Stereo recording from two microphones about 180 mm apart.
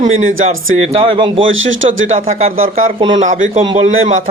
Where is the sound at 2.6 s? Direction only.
50° right (ahead or behind).